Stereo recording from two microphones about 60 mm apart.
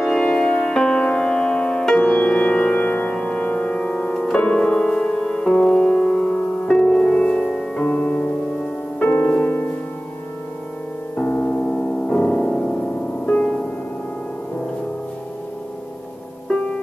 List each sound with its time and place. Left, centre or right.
0.0 s music: centre
7.7 s music: left
11.1 s music: left